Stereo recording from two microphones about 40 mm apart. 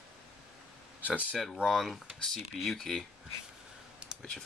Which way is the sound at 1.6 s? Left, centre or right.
Centre.